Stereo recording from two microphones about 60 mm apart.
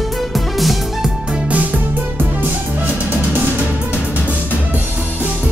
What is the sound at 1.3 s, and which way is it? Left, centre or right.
Music, right.